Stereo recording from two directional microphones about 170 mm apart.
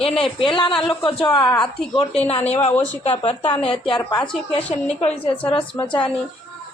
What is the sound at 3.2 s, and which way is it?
Speech, 35° left (ahead or behind).